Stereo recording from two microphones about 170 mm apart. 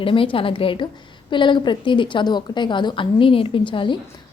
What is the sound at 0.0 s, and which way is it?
A woman's voice, 30° left (ahead or behind).